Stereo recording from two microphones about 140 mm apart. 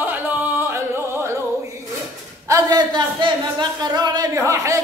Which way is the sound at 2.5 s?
30° right (ahead or behind).